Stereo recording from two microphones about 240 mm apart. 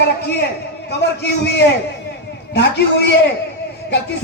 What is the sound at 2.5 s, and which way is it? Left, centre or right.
Speech, left.